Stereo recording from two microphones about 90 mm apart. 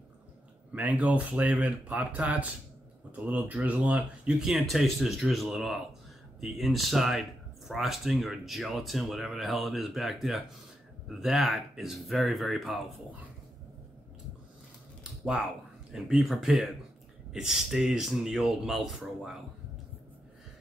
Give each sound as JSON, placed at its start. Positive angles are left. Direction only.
{"t": 0.7, "sound": "speech", "side_deg": -15}
{"t": 15.9, "sound": "speech", "side_deg": -5}